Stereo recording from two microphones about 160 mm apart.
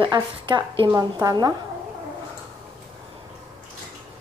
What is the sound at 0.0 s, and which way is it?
A woman's voice, 30° right (ahead or behind).